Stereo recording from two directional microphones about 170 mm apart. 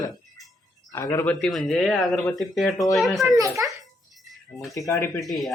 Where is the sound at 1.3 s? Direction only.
5° left (ahead or behind).